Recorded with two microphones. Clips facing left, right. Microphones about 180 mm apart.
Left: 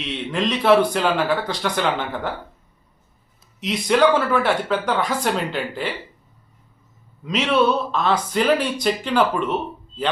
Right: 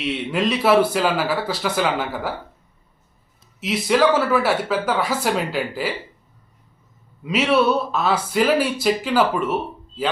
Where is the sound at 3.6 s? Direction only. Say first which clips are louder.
Left 1 dB; 5° right (ahead or behind).